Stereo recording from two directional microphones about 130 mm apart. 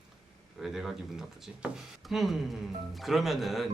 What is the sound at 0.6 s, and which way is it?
Speech, centre (ahead or behind).